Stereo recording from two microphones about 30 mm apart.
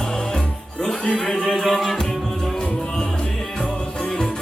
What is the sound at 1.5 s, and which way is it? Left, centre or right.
Music, centre.